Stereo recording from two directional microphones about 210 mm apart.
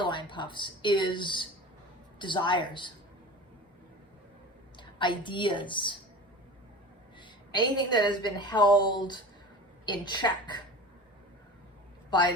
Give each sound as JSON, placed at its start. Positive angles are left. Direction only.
{"t": 0.0, "sound": "a woman's voice", "side_deg": 20}
{"t": 4.8, "sound": "a woman's voice", "side_deg": 20}
{"t": 7.2, "sound": "a woman's voice", "side_deg": 20}